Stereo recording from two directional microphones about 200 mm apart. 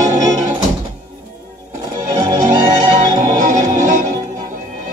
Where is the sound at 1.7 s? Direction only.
20° right (ahead or behind).